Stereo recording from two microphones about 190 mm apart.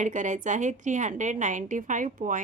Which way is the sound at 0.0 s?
40° right (ahead or behind).